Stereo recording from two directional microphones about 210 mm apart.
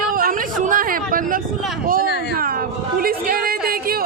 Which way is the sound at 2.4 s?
45° right (ahead or behind).